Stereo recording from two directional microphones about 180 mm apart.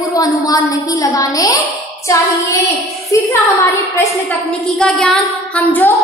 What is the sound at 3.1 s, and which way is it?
Speech, 15° left (ahead or behind).